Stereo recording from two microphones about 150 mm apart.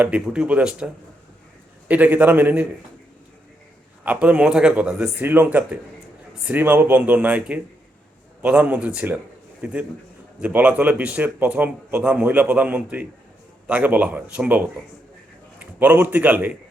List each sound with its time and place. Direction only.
0.0 s speech: 10° right (ahead or behind)
1.9 s speech: 10° right (ahead or behind)
4.0 s a man's voice: 10° right (ahead or behind)